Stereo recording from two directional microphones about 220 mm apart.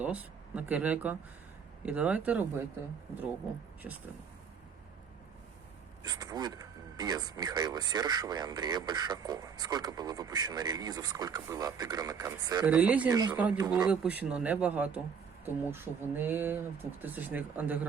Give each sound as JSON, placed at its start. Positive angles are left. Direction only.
{"t": 0.0, "sound": "speech", "side_deg": -5}
{"t": 3.8, "sound": "speech", "side_deg": -5}
{"t": 6.0, "sound": "speech", "side_deg": -15}
{"t": 12.7, "sound": "speech", "side_deg": -5}
{"t": 13.1, "sound": "speech", "side_deg": -15}
{"t": 13.4, "sound": "speech", "side_deg": -5}